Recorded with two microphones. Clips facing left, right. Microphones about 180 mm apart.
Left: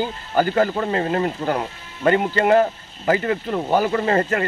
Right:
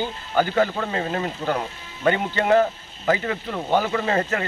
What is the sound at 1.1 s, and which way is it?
Speech, 5° left (ahead or behind).